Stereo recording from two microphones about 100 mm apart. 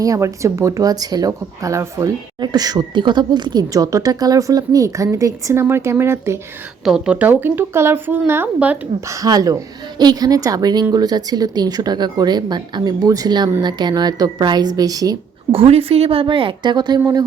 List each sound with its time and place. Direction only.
0.0 s speech: 35° right (ahead or behind)
2.4 s speech: 45° right (ahead or behind); by 6.4 s 25° right (ahead or behind)
6.8 s speech: 5° right (ahead or behind)
9.0 s speech: 35° right (ahead or behind)
15.5 s a woman's voice: 70° right (ahead or behind); by 17.0 s 45° right (ahead or behind)